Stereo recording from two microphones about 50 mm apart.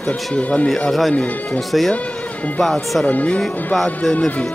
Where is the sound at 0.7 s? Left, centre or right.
Centre.